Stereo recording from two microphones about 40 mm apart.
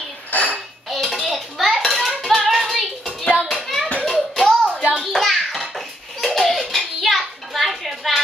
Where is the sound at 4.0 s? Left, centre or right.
Centre.